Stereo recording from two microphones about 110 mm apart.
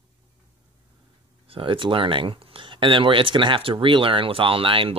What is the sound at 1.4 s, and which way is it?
Speech, 55° right (ahead or behind).